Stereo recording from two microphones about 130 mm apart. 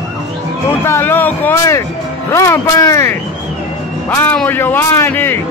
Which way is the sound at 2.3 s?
25° left (ahead or behind).